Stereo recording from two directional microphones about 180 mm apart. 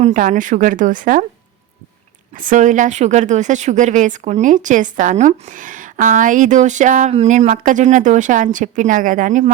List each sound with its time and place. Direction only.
0.0 s a woman's voice: 45° right (ahead or behind)
2.3 s a woman's voice: 50° right (ahead or behind)